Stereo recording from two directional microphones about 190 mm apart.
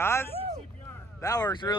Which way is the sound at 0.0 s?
15° left (ahead or behind).